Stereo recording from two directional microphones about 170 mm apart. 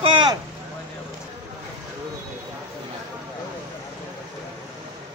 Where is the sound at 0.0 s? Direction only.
30° right (ahead or behind).